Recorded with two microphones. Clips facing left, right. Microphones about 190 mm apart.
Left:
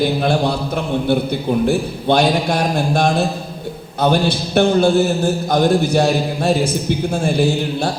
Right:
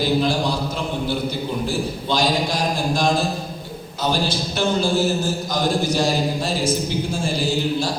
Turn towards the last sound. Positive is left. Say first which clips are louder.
# left 4 dB
turn(degrees=60)  # may be behind; listen again after turning